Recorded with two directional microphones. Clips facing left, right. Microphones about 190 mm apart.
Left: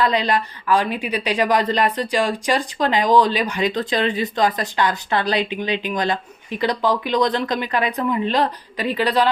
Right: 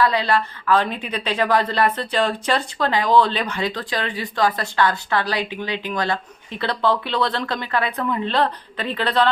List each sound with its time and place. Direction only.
0.0 s a woman's voice: 20° left (ahead or behind)